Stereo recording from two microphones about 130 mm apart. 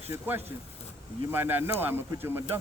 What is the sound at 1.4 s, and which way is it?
Speech, 15° right (ahead or behind).